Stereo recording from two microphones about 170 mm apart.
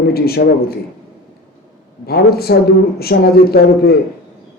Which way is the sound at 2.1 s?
65° left (ahead or behind).